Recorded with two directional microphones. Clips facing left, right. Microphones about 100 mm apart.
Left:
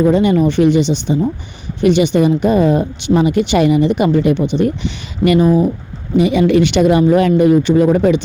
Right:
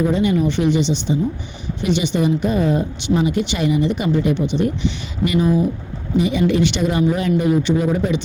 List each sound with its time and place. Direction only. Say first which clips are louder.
0.0 s speech: left 6 dB; 55° left (ahead or behind)
6.1 s speech: left 5 dB; 70° left (ahead or behind)